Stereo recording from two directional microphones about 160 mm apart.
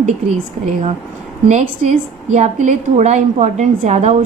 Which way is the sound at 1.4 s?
45° right (ahead or behind).